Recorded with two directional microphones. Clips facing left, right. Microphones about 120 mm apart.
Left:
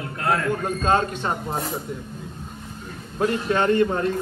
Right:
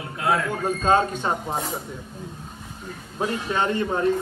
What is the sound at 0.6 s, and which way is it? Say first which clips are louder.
Speech: right 3 dB; 15° right (ahead or behind).